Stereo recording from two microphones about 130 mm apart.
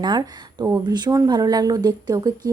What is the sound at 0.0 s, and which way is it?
Speech, 35° right (ahead or behind).